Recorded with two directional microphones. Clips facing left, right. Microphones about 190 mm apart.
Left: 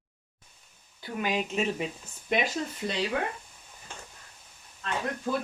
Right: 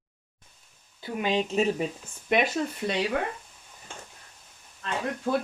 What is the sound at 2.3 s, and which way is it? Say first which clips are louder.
Speech: right 4 dB; 55° right (ahead or behind).